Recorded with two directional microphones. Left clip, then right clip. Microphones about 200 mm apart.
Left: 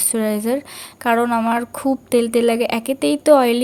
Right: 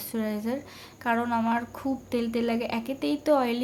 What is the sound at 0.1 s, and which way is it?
A woman's voice, 40° left (ahead or behind).